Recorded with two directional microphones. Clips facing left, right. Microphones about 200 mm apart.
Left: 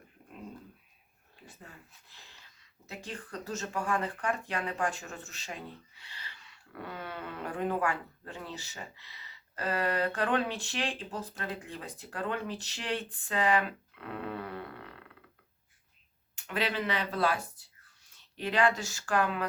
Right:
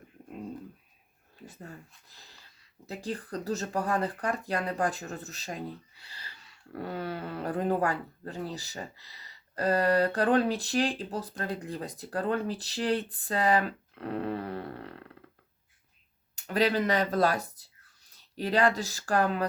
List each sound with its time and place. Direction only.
2.0 s speech: 40° right (ahead or behind)
16.3 s speech: 40° right (ahead or behind)